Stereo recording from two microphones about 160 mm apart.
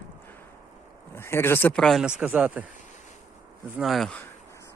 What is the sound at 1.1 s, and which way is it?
Speech, 15° left (ahead or behind).